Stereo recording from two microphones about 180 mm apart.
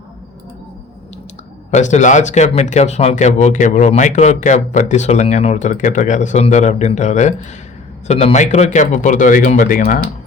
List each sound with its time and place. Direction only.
1.7 s speech: 40° left (ahead or behind)